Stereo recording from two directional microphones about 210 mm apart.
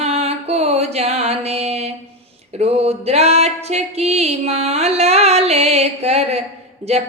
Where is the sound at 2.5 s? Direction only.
30° right (ahead or behind).